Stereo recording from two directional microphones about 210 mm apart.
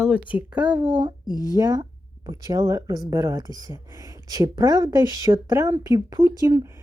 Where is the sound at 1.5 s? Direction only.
15° right (ahead or behind).